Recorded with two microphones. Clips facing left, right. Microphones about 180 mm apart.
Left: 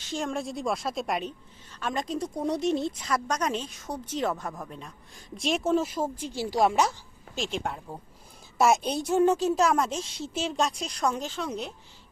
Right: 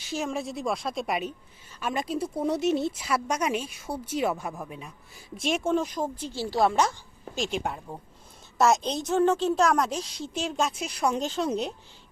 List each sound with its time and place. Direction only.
0.0 s a woman's voice: 5° right (ahead or behind)
8.5 s a woman's voice: 10° left (ahead or behind); by 11.1 s 5° right (ahead or behind)
11.1 s speech: 30° right (ahead or behind)